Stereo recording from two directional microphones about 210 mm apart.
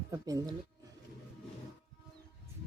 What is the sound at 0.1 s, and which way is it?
Speech, 15° right (ahead or behind).